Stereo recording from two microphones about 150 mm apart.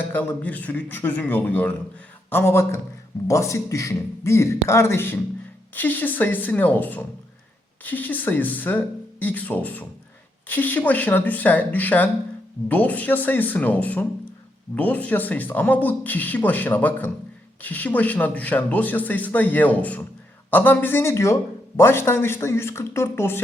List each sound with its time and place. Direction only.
0.1 s a man's voice: 10° left (ahead or behind)